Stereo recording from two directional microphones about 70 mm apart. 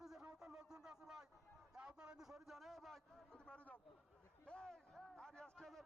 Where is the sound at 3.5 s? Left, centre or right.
Centre.